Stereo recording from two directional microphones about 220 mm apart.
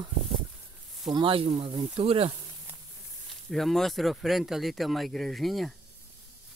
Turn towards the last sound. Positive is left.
turn(degrees=0)  # may be behind; listen again after turning